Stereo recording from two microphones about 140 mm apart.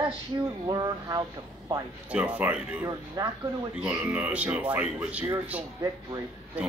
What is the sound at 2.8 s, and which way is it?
Speech, 25° right (ahead or behind).